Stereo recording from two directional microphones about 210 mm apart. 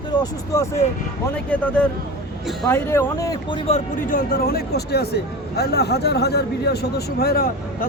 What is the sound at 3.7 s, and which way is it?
Speech, 40° left (ahead or behind).